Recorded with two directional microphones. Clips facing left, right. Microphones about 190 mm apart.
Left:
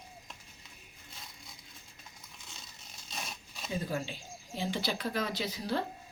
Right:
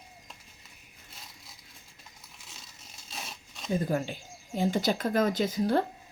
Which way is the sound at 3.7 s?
50° right (ahead or behind).